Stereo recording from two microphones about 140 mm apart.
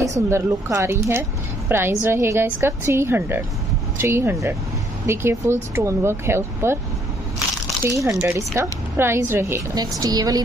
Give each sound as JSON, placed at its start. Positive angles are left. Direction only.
{"t": 0.3, "sound": "speech", "side_deg": -20}
{"t": 7.8, "sound": "speech", "side_deg": -20}
{"t": 9.8, "sound": "speech", "side_deg": -30}